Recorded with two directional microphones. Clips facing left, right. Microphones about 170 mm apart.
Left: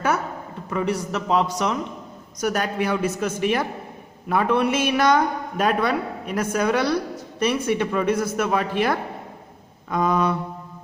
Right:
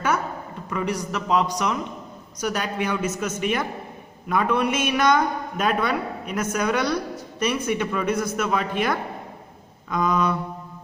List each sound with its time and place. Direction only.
0.7 s a man's voice: 30° left (ahead or behind)
2.5 s a woman's voice: 40° left (ahead or behind)